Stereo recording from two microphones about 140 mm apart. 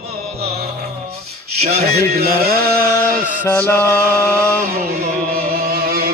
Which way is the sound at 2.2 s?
90° right.